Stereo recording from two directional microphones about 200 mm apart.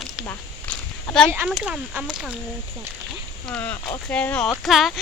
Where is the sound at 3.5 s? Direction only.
5° left (ahead or behind).